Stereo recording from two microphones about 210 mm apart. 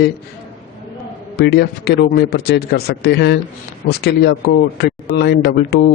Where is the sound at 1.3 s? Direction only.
50° left (ahead or behind).